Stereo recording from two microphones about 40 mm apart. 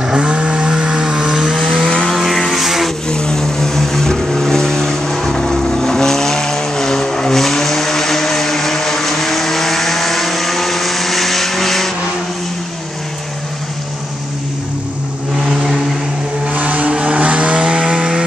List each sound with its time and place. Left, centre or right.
0.2 s vehicle: right
1.7 s vehicle: centre
3.1 s vehicle: centre
15.4 s vehicle: centre
16.5 s vehicle: right